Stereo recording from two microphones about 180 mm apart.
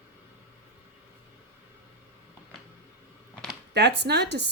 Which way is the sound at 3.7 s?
70° right (ahead or behind).